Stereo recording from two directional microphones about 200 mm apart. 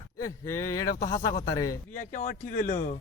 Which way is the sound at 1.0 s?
50° left (ahead or behind).